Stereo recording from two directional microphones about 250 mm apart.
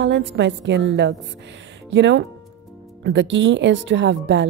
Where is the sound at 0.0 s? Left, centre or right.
Right.